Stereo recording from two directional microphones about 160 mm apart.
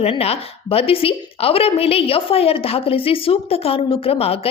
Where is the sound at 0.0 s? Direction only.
40° left (ahead or behind).